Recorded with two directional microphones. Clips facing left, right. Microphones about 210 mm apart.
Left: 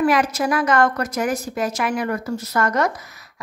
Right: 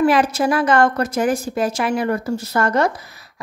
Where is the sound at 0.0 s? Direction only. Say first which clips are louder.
Right 3 dB; 30° right (ahead or behind).